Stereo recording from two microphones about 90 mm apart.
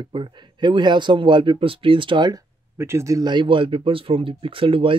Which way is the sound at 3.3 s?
65° right (ahead or behind).